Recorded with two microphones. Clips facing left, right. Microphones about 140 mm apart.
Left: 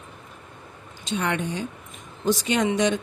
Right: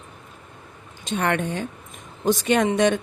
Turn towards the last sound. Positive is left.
turn(degrees=-55)  # may be behind; listen again after turning